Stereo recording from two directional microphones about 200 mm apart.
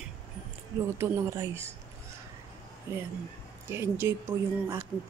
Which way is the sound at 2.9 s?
15° right (ahead or behind).